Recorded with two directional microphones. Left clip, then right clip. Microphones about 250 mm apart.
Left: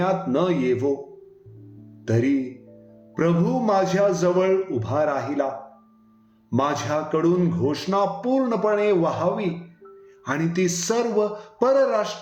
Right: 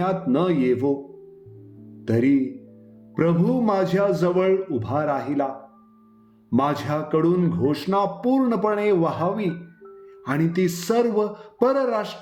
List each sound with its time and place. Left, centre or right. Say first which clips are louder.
0.0 s speech: even; right
2.0 s speech: right 2 dB; right
6.5 s speech: even; right